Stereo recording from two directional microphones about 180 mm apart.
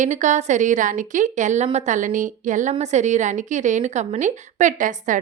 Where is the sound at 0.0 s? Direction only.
40° right (ahead or behind).